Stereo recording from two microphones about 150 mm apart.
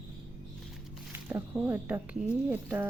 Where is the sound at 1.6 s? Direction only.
15° right (ahead or behind).